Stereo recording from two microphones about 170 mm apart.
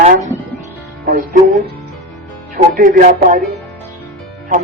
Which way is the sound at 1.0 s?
55° right (ahead or behind).